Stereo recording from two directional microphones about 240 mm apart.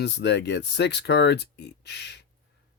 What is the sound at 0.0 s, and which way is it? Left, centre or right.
Speech, left.